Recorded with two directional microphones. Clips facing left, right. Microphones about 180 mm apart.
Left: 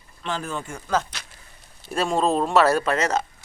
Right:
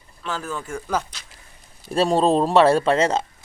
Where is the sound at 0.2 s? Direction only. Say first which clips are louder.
Even; 25° left (ahead or behind).